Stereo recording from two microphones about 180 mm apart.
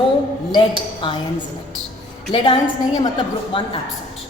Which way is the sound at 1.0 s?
25° left (ahead or behind).